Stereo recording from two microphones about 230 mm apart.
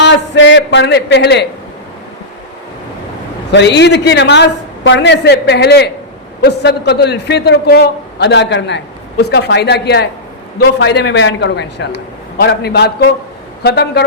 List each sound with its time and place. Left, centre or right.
0.0 s a man's voice: left
3.5 s a man's voice: left